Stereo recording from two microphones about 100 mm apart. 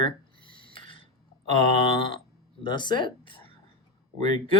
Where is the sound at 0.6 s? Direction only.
60° left (ahead or behind).